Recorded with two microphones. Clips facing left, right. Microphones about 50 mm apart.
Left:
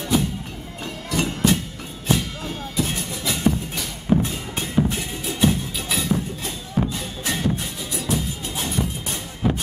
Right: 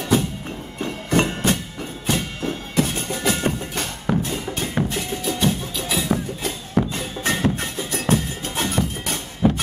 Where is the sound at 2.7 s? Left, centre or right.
Right.